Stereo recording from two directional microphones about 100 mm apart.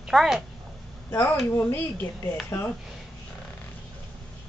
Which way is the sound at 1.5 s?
20° left (ahead or behind).